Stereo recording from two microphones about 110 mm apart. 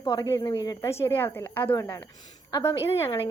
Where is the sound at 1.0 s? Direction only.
20° left (ahead or behind).